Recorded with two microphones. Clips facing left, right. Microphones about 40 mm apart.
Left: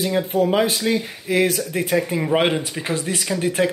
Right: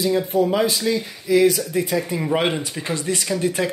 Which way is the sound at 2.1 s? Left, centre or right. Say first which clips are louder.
Left 1 dB; centre.